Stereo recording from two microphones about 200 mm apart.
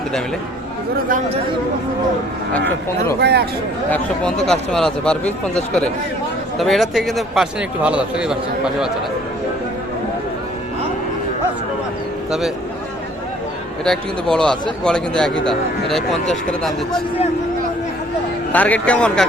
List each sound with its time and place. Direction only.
2.5 s speech: 10° left (ahead or behind)
3.2 s speech: 55° right (ahead or behind)
3.8 s speech: 5° left (ahead or behind)
6.6 s speech: centre (ahead or behind)
13.8 s speech: 5° left (ahead or behind)
18.5 s speech: 10° left (ahead or behind)